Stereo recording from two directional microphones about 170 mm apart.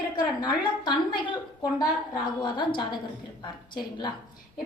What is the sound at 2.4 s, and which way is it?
Speech, 30° left (ahead or behind).